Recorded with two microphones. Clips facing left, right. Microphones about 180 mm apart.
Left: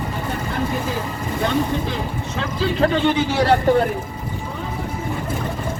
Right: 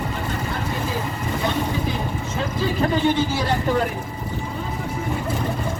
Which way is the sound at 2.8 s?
75° left (ahead or behind).